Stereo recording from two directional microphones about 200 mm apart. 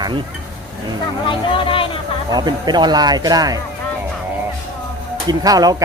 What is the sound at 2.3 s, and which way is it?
Speech, 20° right (ahead or behind).